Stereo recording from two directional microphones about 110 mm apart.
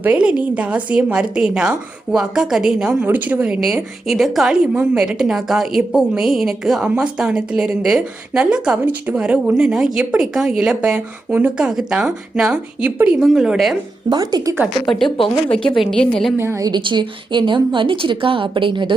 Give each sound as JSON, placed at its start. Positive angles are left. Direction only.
{"t": 0.0, "sound": "a woman's voice", "side_deg": -10}
{"t": 14.1, "sound": "speech", "side_deg": -40}
{"t": 14.8, "sound": "a woman's voice", "side_deg": 5}
{"t": 16.4, "sound": "a woman's voice", "side_deg": -20}
{"t": 16.6, "sound": "a woman's voice", "side_deg": -45}